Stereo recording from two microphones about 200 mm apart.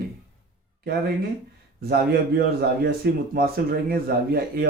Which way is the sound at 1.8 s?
50° right (ahead or behind).